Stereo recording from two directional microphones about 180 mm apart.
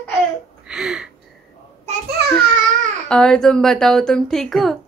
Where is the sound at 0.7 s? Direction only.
5° right (ahead or behind).